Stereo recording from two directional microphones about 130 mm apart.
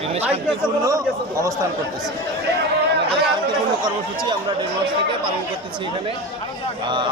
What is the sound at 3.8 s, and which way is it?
Speech, 35° right (ahead or behind).